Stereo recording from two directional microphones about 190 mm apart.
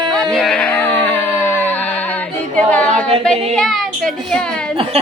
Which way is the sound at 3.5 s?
Centre (ahead or behind).